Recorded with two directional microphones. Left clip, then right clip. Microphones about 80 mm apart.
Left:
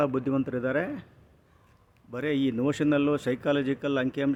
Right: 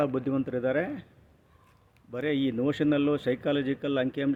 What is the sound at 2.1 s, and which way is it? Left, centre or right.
Speech, left.